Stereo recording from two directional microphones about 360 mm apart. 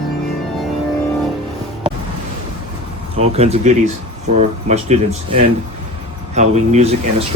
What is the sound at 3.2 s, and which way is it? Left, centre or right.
Speech, centre.